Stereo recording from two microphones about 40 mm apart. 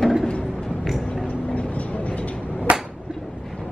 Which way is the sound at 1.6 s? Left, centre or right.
Left.